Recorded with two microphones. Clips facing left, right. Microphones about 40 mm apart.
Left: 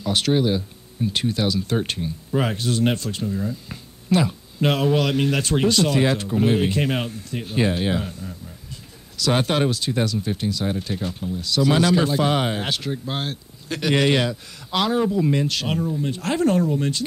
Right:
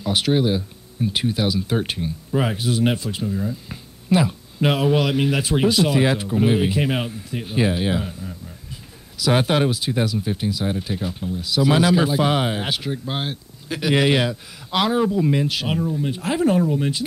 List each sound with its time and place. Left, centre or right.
0.0 s speech: centre